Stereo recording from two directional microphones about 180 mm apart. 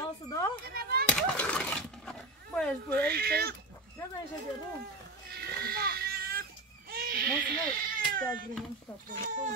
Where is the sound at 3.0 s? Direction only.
60° right (ahead or behind).